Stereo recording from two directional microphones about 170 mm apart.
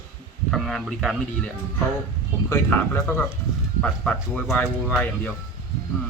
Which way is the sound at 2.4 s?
15° left (ahead or behind).